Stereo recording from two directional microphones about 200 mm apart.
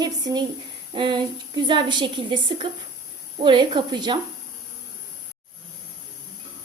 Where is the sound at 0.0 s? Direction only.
20° right (ahead or behind).